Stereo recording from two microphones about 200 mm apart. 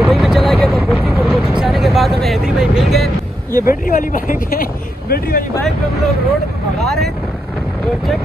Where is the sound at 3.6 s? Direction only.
45° left (ahead or behind).